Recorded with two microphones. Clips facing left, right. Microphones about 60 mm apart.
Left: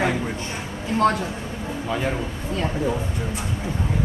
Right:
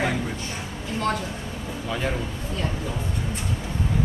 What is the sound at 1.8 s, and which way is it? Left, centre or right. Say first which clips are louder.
Speech: left 2 dB; centre.